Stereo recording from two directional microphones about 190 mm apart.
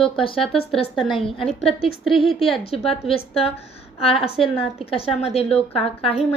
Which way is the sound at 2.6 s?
30° left (ahead or behind).